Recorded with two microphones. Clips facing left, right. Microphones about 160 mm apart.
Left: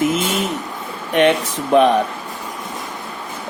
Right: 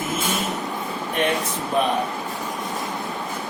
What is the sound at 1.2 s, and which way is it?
Speech, 75° left (ahead or behind).